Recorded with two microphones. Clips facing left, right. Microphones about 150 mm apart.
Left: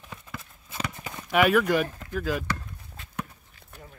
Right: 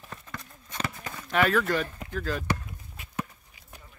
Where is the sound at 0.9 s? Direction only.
15° left (ahead or behind).